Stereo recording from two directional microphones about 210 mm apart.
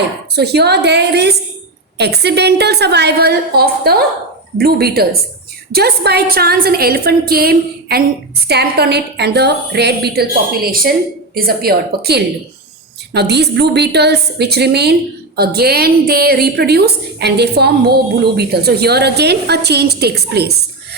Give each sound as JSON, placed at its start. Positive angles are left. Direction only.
{"t": 0.3, "sound": "a woman's voice", "side_deg": -50}